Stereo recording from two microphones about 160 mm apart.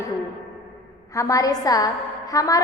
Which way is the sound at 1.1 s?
20° left (ahead or behind).